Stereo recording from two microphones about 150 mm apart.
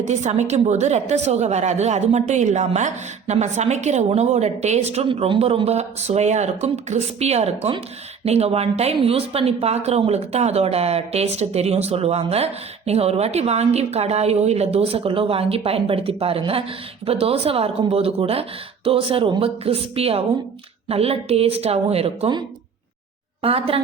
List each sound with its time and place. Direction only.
0.0 s a woman's voice: 50° right (ahead or behind)
23.4 s a woman's voice: 40° right (ahead or behind)